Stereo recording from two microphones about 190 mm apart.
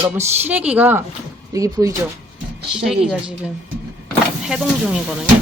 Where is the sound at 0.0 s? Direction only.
10° right (ahead or behind).